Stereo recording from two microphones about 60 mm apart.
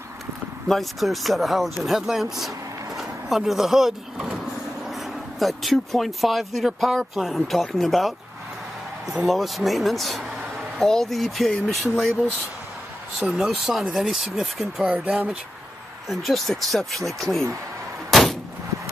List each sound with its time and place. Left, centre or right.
0.7 s speech: centre
3.0 s vehicle: centre
4.8 s speech: centre
9.2 s speech: centre
13.3 s speech: centre
14.9 s speech: centre
16.1 s speech: centre
18.1 s a sound: centre